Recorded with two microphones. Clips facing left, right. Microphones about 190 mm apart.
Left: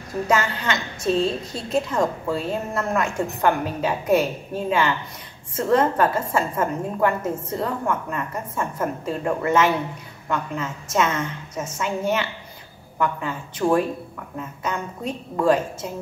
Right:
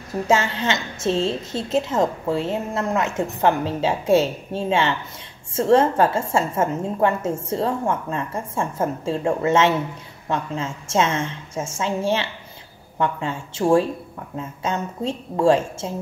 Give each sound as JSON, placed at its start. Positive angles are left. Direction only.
{"t": 0.3, "sound": "a woman's voice", "side_deg": -25}